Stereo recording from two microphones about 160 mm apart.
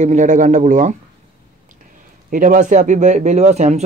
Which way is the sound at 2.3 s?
55° right (ahead or behind).